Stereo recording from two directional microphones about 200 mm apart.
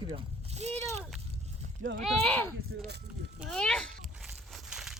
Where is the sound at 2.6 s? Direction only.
55° right (ahead or behind).